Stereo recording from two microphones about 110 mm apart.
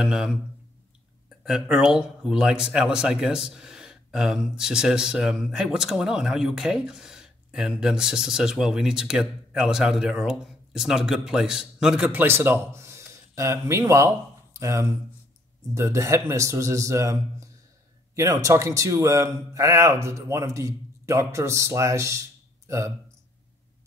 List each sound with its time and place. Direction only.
0.0 s speech: 5° right (ahead or behind)
1.4 s a man's voice: 5° right (ahead or behind); by 22.9 s 25° right (ahead or behind)